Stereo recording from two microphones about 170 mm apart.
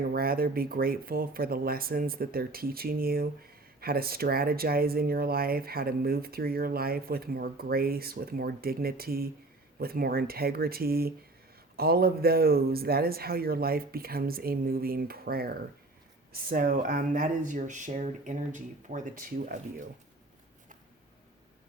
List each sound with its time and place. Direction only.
0.0 s speech: 60° right (ahead or behind)